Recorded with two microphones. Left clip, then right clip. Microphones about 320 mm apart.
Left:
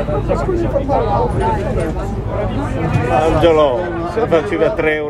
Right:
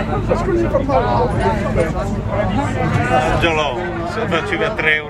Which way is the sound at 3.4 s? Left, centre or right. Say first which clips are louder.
Left 6 dB; centre.